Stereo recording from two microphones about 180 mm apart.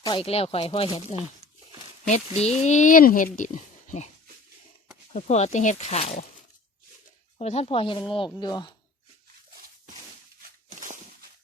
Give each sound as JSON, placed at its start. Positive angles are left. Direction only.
{"t": 0.0, "sound": "speech", "side_deg": 30}
{"t": 5.1, "sound": "speech", "side_deg": 40}
{"t": 7.3, "sound": "speech", "side_deg": 35}
{"t": 10.8, "sound": "a sound", "side_deg": -45}